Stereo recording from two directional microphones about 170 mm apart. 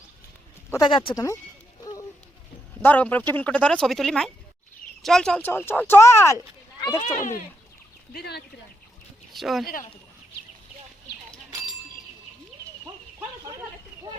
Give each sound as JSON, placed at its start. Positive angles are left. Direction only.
{"t": 0.7, "sound": "speech", "side_deg": 25}
{"t": 1.8, "sound": "a sound", "side_deg": 20}
{"t": 2.8, "sound": "speech", "side_deg": 10}
{"t": 6.7, "sound": "a sound", "side_deg": 20}
{"t": 7.2, "sound": "speech", "side_deg": 50}
{"t": 8.1, "sound": "speech", "side_deg": 70}
{"t": 9.3, "sound": "speech", "side_deg": 0}